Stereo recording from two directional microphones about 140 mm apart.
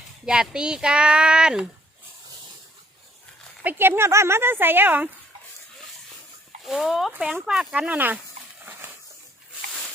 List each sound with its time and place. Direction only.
0.3 s speech: 5° right (ahead or behind)
3.6 s speech: 15° right (ahead or behind)
6.7 s speech: centre (ahead or behind)
8.6 s dog: 15° right (ahead or behind)